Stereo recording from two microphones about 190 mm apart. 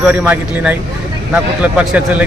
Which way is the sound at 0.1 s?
10° right (ahead or behind).